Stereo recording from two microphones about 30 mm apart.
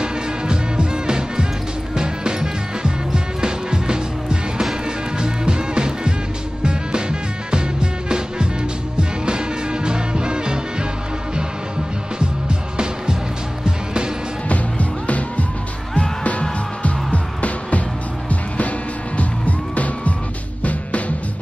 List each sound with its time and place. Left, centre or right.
0.0 s music: right
13.7 s music: right
14.5 s music: left
19.1 s music: left